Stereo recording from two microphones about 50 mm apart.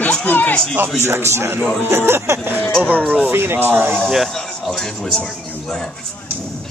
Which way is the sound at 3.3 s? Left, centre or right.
Right.